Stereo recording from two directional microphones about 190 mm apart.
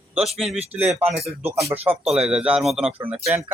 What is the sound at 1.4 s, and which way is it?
Speech, 15° right (ahead or behind).